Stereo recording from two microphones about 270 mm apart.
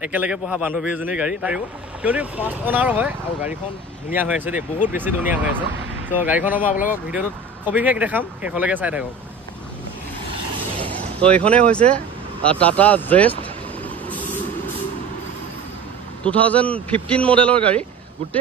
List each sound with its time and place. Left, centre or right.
0.0 s speech: centre
6.7 s speech: left
7.1 s speech: centre
10.9 s speech: centre
12.4 s vehicle: centre
16.3 s speech: centre